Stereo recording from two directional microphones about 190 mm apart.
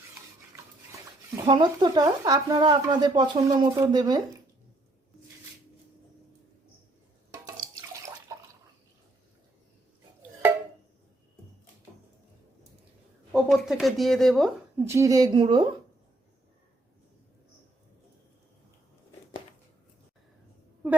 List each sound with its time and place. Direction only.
1.5 s speech: 25° right (ahead or behind)
7.4 s water: 15° right (ahead or behind)
13.3 s speech: centre (ahead or behind)
14.8 s speech: 15° right (ahead or behind)